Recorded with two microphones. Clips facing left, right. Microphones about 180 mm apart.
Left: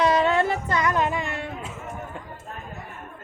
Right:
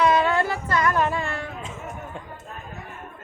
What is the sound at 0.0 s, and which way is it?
Music, 25° left (ahead or behind).